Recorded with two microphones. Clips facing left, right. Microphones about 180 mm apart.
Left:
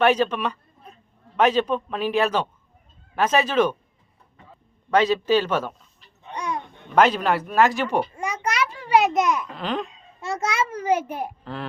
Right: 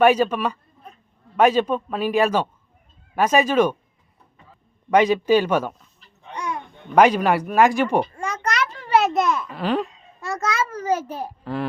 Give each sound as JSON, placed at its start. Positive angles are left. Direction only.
{"t": 0.0, "sound": "speech", "side_deg": -10}
{"t": 4.9, "sound": "speech", "side_deg": -15}
{"t": 6.3, "sound": "a sound", "side_deg": 15}
{"t": 6.9, "sound": "speech", "side_deg": -10}
{"t": 8.1, "sound": "a child's voice", "side_deg": 10}
{"t": 9.6, "sound": "speech", "side_deg": -5}
{"t": 10.2, "sound": "a child's voice", "side_deg": 25}
{"t": 10.8, "sound": "a child's voice", "side_deg": 15}